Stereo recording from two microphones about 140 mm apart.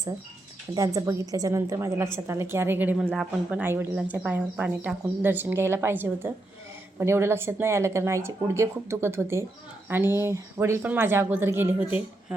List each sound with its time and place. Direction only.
0.7 s speech: 25° right (ahead or behind)